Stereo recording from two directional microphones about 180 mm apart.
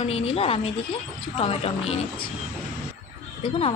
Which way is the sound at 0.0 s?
35° left (ahead or behind).